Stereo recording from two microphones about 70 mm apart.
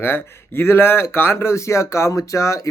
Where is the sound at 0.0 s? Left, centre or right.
Left.